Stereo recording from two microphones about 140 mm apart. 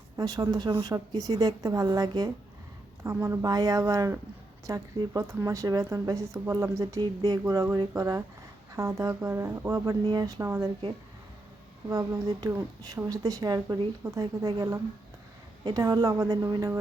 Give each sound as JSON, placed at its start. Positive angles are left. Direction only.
{"t": 0.2, "sound": "a woman's voice", "side_deg": -25}
{"t": 11.9, "sound": "a woman's voice", "side_deg": -25}